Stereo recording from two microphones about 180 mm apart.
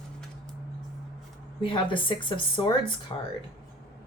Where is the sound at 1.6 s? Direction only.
25° left (ahead or behind).